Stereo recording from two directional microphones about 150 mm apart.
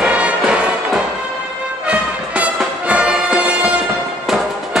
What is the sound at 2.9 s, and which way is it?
Music, 5° right (ahead or behind).